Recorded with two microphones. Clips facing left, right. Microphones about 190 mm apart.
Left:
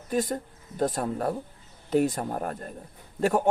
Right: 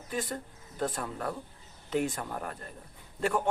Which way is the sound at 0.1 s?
40° left (ahead or behind).